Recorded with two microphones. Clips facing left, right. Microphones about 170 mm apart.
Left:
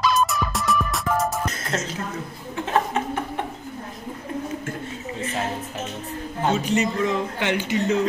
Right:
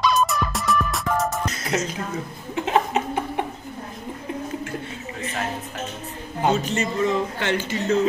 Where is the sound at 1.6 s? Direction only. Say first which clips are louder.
Right 2 dB; 10° right (ahead or behind).